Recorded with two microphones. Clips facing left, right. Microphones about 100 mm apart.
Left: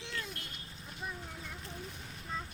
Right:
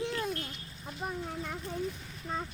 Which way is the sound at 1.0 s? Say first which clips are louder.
Right 5 dB; 50° right (ahead or behind).